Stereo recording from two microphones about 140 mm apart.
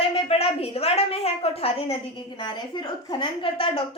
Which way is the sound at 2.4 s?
30° left (ahead or behind).